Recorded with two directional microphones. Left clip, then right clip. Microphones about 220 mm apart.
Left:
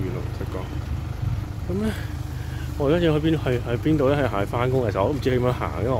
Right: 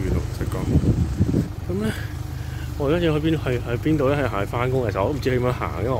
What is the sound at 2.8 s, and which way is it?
Speech, 10° left (ahead or behind).